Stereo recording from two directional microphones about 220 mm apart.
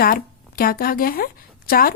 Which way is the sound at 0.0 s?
40° left (ahead or behind).